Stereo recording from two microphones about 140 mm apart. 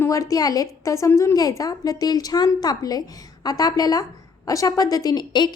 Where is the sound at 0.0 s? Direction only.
25° left (ahead or behind).